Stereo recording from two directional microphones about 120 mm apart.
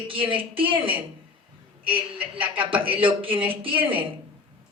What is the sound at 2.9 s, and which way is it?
Speech, 45° right (ahead or behind).